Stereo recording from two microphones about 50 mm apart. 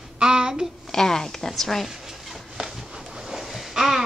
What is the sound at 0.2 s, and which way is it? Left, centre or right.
Child singing, centre.